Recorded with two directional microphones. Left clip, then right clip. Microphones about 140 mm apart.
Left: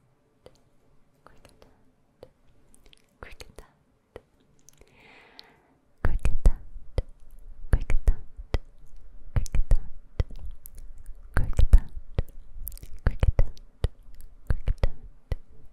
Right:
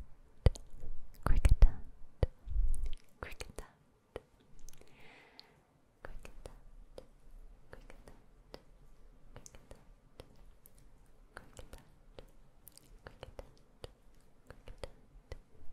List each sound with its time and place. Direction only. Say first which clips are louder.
0.5 s squish: right 15 dB; 35° right (ahead or behind)
1.3 s whispering: right 13 dB; 30° right (ahead or behind)
2.2 s a sound: right 9 dB; 25° right (ahead or behind)
2.9 s whispering: left 2 dB; centre (ahead or behind)
4.6 s chewing: left 5 dB; 10° left (ahead or behind)
5.3 s a sound: left 8 dB; 35° left (ahead or behind)
6.0 s whispering: left 16 dB; 45° left (ahead or behind)
7.0 s a sound: left 15 dB; 50° left (ahead or behind)
7.7 s whispering: left 18 dB; 50° left (ahead or behind)
9.3 s clicking: left 17 dB; 45° left (ahead or behind)
11.3 s whispering: left 18 dB; 45° left (ahead or behind)
14.5 s a sound: left 13 dB; 30° left (ahead or behind)